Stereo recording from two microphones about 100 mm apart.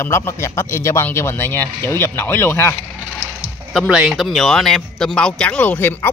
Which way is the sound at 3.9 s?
Centre (ahead or behind).